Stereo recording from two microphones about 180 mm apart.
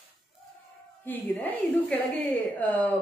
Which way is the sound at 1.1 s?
10° left (ahead or behind).